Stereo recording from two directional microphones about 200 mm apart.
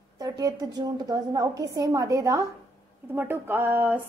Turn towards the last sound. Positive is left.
turn(degrees=-10)  # may be behind; listen again after turning